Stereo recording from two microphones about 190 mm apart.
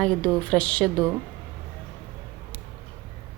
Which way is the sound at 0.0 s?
5° left (ahead or behind).